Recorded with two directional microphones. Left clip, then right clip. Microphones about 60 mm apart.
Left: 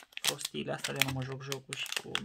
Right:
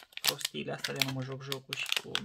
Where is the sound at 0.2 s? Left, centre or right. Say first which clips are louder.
Right 2 dB; centre.